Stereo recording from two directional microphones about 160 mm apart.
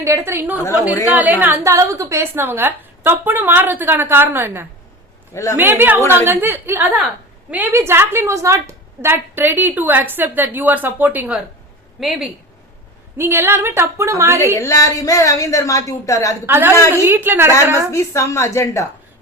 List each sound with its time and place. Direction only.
0.0 s a woman's voice: 15° right (ahead or behind)
5.3 s a woman's voice: 20° left (ahead or behind)
5.5 s a woman's voice: 15° right (ahead or behind)
13.1 s a woman's voice: 15° right (ahead or behind)
14.5 s a woman's voice: 20° left (ahead or behind)
16.5 s a woman's voice: 15° right (ahead or behind)
17.9 s a woman's voice: 20° left (ahead or behind)